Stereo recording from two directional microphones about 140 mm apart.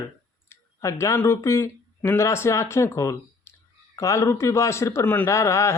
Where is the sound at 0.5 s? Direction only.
20° left (ahead or behind).